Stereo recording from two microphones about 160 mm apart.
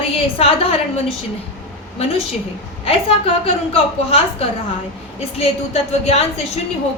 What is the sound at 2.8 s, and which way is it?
A woman's voice, 35° left (ahead or behind).